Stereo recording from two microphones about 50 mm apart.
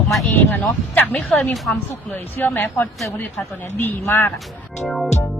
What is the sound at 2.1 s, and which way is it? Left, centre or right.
Speech, left.